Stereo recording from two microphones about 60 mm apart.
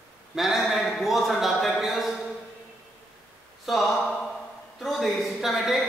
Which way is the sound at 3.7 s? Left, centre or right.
Centre.